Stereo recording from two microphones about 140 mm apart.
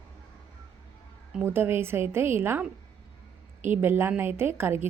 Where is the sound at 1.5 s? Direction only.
15° right (ahead or behind).